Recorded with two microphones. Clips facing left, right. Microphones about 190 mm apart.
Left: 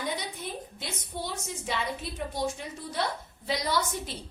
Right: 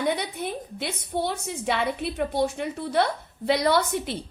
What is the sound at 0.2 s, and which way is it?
A woman's voice, 65° right (ahead or behind).